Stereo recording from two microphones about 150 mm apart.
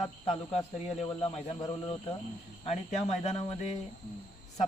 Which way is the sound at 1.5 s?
30° left (ahead or behind).